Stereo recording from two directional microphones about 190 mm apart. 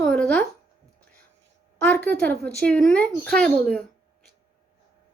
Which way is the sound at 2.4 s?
5° left (ahead or behind).